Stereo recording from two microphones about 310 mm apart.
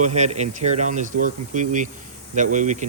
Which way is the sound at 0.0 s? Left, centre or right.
Right.